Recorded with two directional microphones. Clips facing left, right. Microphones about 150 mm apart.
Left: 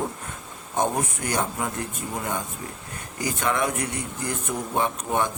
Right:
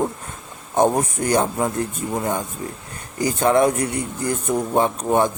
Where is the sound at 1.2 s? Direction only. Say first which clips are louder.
Right 9 dB; 35° right (ahead or behind).